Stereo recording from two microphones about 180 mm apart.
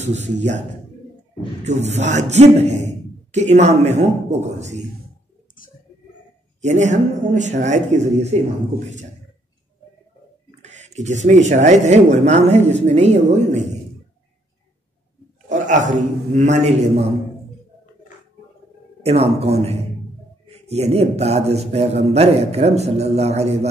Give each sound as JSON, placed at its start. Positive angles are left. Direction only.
{"t": 0.0, "sound": "a man's voice", "side_deg": -40}
{"t": 6.6, "sound": "a man's voice", "side_deg": -40}
{"t": 10.6, "sound": "a man's voice", "side_deg": -40}
{"t": 15.4, "sound": "a sound", "side_deg": -45}
{"t": 16.3, "sound": "a man's voice", "side_deg": -40}
{"t": 19.0, "sound": "a man's voice", "side_deg": -35}